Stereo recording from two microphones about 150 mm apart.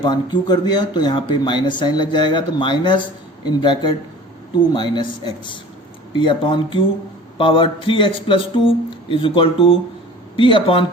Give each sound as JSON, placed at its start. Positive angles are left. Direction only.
{"t": 0.0, "sound": "speech", "side_deg": 30}